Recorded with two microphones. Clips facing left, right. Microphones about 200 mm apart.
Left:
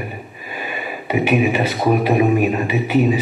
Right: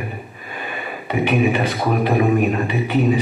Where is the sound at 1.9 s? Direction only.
5° left (ahead or behind).